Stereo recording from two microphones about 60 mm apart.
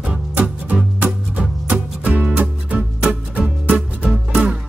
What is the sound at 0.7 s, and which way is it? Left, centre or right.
Music, right.